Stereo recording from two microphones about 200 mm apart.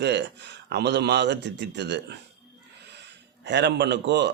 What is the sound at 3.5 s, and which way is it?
Speech, 60° right (ahead or behind).